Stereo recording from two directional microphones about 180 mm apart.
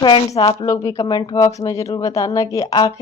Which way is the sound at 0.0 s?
25° left (ahead or behind).